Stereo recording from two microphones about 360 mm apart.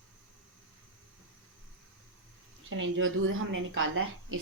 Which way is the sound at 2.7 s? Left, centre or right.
Right.